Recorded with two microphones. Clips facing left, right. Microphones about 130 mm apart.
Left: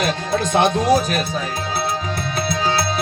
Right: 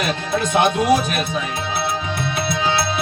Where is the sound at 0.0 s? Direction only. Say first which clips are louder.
Left 1 dB; 35° left (ahead or behind).